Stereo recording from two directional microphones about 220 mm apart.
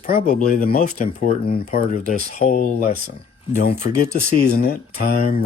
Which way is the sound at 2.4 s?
35° left (ahead or behind).